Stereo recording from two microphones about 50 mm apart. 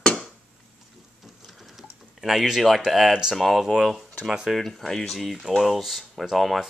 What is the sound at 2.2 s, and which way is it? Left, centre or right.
Speech, centre.